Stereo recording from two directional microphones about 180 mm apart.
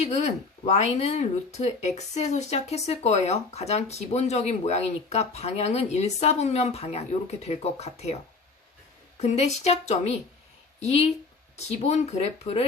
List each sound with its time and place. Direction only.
0.0 s speech: 40° left (ahead or behind)
9.2 s speech: 35° left (ahead or behind)